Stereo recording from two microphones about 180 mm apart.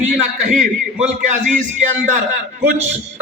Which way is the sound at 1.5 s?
40° right (ahead or behind).